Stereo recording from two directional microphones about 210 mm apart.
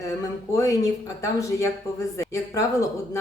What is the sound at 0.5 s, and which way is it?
Speech, 15° left (ahead or behind).